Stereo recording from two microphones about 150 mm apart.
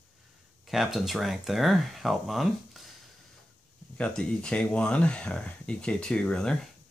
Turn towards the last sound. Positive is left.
turn(degrees=5)  # may be behind; listen again after turning